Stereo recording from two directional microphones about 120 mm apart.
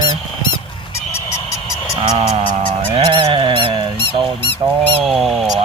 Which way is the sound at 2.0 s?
60° right (ahead or behind).